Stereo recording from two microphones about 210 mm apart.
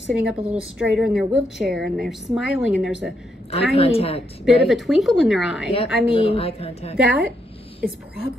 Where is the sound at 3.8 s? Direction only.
30° left (ahead or behind).